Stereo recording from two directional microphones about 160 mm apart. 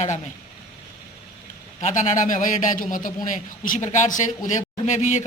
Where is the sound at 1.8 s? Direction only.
50° left (ahead or behind).